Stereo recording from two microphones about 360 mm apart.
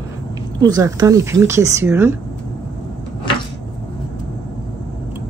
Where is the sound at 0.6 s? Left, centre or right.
Centre.